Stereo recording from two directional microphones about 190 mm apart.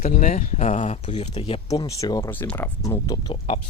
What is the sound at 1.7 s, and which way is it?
Speech, 15° left (ahead or behind).